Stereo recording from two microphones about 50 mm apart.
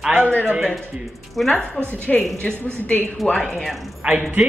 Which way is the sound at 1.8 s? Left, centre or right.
Left.